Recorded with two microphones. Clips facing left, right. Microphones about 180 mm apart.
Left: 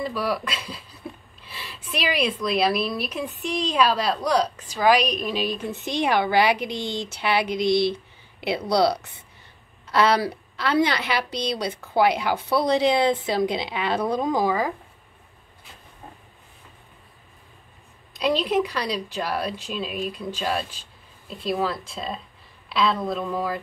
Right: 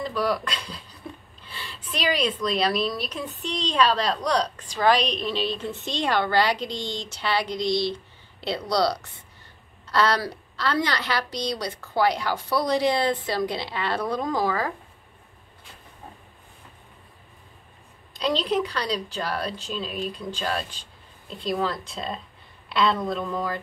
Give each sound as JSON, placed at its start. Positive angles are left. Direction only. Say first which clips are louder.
{"t": 0.0, "sound": "a woman's voice", "louder": "even", "side_deg": 5}
{"t": 6.7, "sound": "speech", "louder": "left 3 dB", "side_deg": -20}
{"t": 8.6, "sound": "a woman's voice", "louder": "left 3 dB", "side_deg": 20}
{"t": 18.1, "sound": "a woman's voice", "louder": "left 2 dB", "side_deg": 10}